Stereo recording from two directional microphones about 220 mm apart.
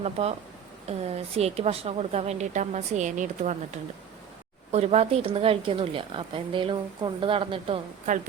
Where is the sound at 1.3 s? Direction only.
30° right (ahead or behind).